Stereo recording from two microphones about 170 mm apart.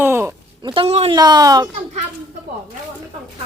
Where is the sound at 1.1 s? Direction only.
25° right (ahead or behind).